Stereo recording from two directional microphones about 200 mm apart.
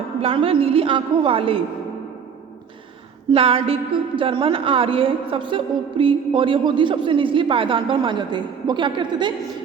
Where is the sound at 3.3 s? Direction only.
30° right (ahead or behind).